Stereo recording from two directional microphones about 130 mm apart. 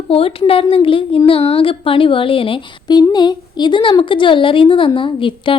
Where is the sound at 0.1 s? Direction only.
45° left (ahead or behind).